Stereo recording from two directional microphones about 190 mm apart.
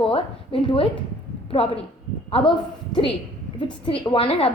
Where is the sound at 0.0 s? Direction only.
30° left (ahead or behind).